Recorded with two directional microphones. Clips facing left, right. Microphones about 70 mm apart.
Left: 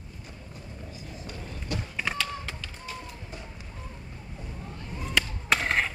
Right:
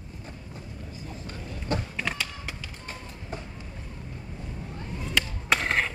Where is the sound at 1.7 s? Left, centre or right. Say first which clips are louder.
Right 5 dB; right.